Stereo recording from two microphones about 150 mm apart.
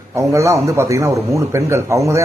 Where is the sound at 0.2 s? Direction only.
20° right (ahead or behind).